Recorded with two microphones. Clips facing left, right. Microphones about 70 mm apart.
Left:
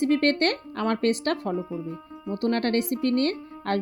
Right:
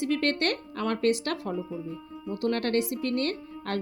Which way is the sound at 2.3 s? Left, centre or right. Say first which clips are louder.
Left 3 dB; left.